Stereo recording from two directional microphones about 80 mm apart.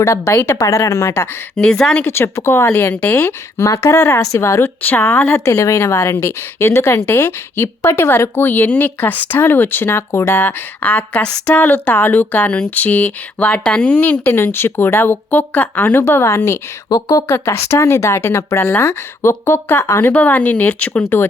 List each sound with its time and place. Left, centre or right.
0.0 s speech: left
1.5 s speech: centre
2.0 s speech: left
2.9 s speech: left
3.7 s speech: left
4.8 s speech: left
5.5 s speech: left
16.0 s speech: left
16.9 s speech: left
17.2 s speech: left
20.1 s speech: centre